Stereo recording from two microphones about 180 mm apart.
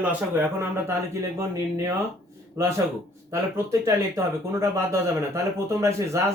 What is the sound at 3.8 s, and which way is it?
Speech, 15° right (ahead or behind).